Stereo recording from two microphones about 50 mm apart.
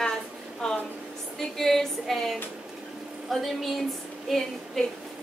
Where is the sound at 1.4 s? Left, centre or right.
Centre.